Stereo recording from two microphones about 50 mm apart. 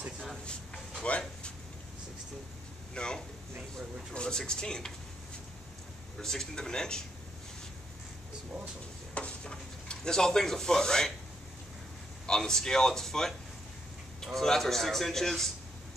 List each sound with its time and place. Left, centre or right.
1.0 s a sound: left
2.9 s a sound: centre
4.1 s speech: centre
6.2 s a man's voice: centre
9.1 s speech: left
12.3 s a man's voice: centre